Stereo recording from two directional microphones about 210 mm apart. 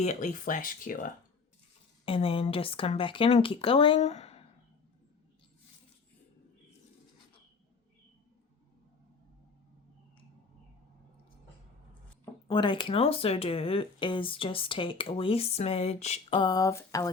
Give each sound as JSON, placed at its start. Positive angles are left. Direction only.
{"t": 0.0, "sound": "speech", "side_deg": 35}
{"t": 2.0, "sound": "speech", "side_deg": 25}
{"t": 12.5, "sound": "speech", "side_deg": 25}